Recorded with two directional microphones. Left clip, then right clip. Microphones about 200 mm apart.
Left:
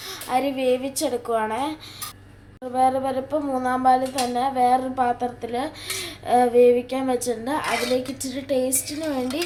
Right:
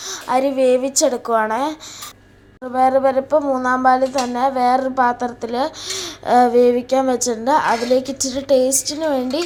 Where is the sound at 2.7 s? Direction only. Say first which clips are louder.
Right 6 dB; 25° right (ahead or behind).